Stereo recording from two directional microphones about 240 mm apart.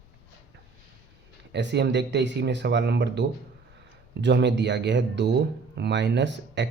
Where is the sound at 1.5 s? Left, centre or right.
Right.